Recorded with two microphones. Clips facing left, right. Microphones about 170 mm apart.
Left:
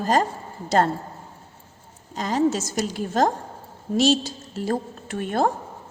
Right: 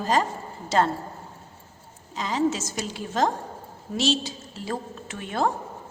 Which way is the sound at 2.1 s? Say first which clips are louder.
Left 3 dB; 45° left (ahead or behind).